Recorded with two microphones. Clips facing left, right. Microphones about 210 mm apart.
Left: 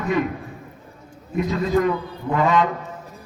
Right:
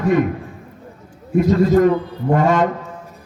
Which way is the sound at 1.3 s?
45° right (ahead or behind).